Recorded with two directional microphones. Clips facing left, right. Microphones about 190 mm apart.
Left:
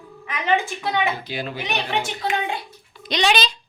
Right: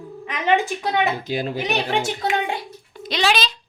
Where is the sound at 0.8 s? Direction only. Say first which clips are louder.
Right 2 dB; 40° right (ahead or behind).